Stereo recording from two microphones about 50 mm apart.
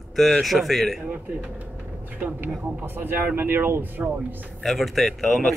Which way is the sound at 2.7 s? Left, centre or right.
Right.